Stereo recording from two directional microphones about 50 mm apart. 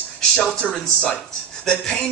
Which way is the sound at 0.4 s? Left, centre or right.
Left.